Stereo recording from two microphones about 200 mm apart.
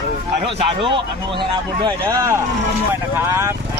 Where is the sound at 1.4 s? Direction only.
20° right (ahead or behind).